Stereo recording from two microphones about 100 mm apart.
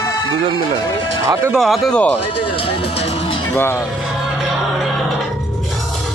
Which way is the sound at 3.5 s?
25° left (ahead or behind).